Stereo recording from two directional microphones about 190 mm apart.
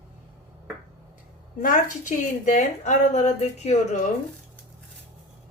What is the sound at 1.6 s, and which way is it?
A woman's voice, 45° left (ahead or behind).